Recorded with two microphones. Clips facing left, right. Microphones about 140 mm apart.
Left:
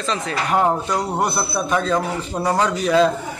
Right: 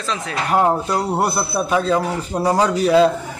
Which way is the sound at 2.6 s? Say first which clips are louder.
Right 4 dB; 35° right (ahead or behind).